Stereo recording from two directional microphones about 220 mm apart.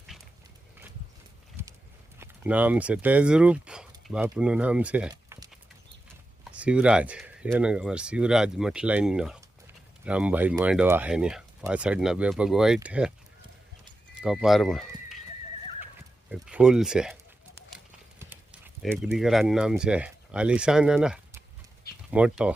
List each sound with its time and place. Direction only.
1.6 s horse: 10° right (ahead or behind)
2.1 s speech: 10° right (ahead or behind)
5.1 s a sound: 15° right (ahead or behind)
6.5 s speech: 5° right (ahead or behind)
14.3 s speech: centre (ahead or behind)
16.3 s speech: 5° right (ahead or behind)
18.2 s speech: 10° right (ahead or behind)